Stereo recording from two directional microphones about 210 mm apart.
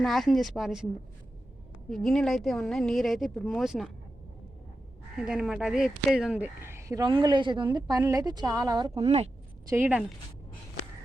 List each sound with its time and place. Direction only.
0.0 s speech: centre (ahead or behind)
1.9 s speech: centre (ahead or behind)
5.1 s speech: 5° right (ahead or behind)
9.0 s speech: 30° right (ahead or behind)
9.6 s speech: 10° right (ahead or behind)